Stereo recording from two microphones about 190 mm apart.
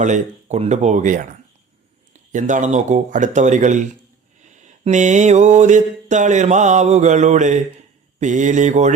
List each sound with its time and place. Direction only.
0.0 s mantra: 40° right (ahead or behind)
2.3 s mantra: 40° right (ahead or behind)